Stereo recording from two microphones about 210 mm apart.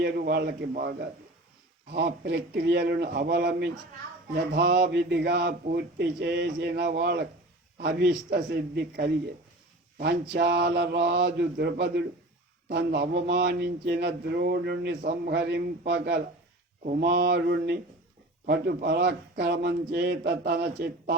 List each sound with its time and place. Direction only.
0.0 s mantra: 50° right (ahead or behind)